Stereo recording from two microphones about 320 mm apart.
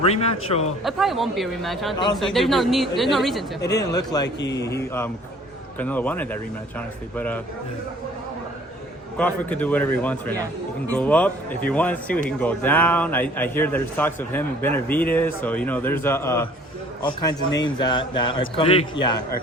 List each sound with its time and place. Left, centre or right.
0.0 s a man's voice: centre
0.9 s a man's voice: centre
3.6 s a man's voice: centre
9.1 s a man's voice: centre